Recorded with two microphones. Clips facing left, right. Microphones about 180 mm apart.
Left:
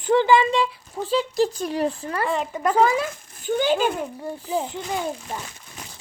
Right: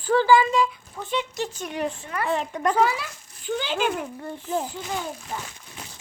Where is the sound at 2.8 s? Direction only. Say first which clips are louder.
Left 3 dB; 45° left (ahead or behind).